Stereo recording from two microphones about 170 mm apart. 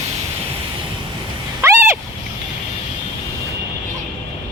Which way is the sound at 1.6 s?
15° right (ahead or behind).